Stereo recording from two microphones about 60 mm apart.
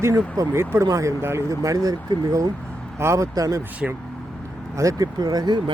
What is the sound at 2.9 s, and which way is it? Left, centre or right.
Speech, right.